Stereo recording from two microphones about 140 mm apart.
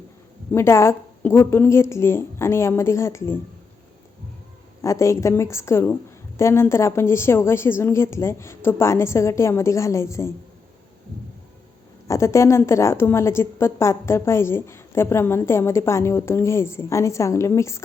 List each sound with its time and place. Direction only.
0.5 s a woman's voice: 20° left (ahead or behind)
4.8 s a woman's voice: 20° left (ahead or behind)
12.0 s a woman's voice: 20° left (ahead or behind)